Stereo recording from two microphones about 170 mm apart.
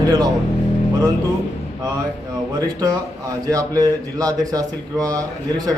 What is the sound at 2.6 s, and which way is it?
Speech, 20° right (ahead or behind).